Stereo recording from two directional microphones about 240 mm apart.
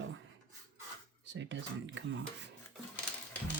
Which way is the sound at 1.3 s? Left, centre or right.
Right.